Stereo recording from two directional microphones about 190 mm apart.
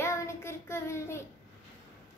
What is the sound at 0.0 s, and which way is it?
Child singing, 15° left (ahead or behind).